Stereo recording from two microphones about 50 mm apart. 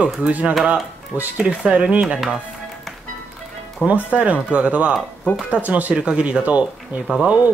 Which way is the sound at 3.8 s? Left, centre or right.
Right.